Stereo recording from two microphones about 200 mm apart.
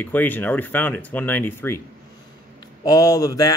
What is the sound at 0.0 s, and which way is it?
Speech, 10° left (ahead or behind).